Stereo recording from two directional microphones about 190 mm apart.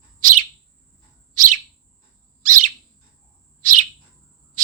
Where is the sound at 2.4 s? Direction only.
45° right (ahead or behind).